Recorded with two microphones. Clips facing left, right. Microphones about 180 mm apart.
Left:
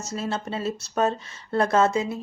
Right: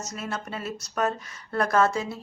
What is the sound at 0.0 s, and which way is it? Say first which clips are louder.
Speech: left 4 dB; 30° left (ahead or behind).